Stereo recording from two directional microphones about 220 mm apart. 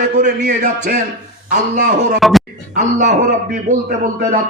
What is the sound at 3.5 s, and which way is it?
Speech, 35° right (ahead or behind).